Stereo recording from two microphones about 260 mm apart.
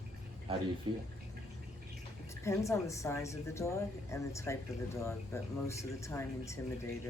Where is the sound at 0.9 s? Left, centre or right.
Centre.